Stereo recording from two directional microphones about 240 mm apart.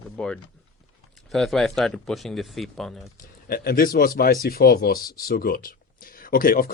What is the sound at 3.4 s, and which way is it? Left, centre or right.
Speech, left.